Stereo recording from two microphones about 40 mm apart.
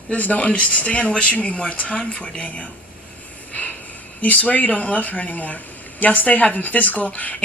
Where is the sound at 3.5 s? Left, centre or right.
Left.